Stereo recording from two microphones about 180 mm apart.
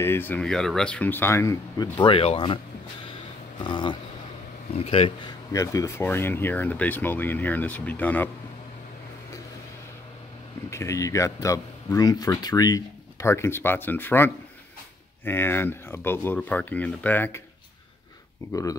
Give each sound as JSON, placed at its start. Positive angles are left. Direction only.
{"t": 0.0, "sound": "speech", "side_deg": 10}
{"t": 3.5, "sound": "a sound", "side_deg": 25}
{"t": 4.7, "sound": "speech", "side_deg": 35}
{"t": 5.5, "sound": "speech", "side_deg": 20}
{"t": 10.7, "sound": "speech", "side_deg": 15}
{"t": 18.5, "sound": "a sound", "side_deg": 20}